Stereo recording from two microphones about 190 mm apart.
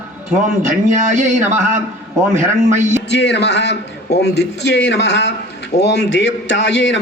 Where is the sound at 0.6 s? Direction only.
40° right (ahead or behind).